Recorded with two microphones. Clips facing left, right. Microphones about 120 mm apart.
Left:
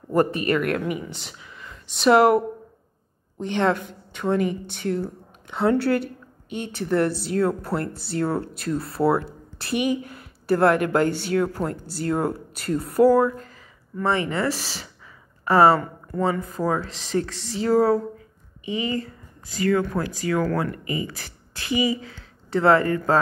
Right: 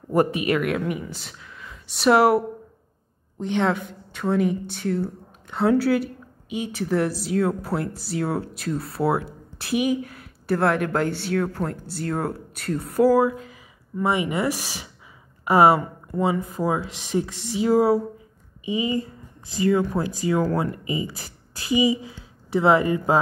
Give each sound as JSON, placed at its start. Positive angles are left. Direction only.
{"t": 0.1, "sound": "a woman's voice", "side_deg": -5}